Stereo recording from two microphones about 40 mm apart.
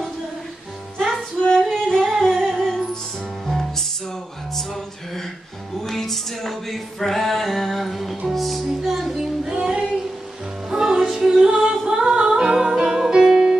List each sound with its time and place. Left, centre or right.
1.5 s female singing: centre
2.0 s music: centre
5.8 s music: centre
8.8 s child singing: centre
9.1 s child singing: centre
10.7 s music: centre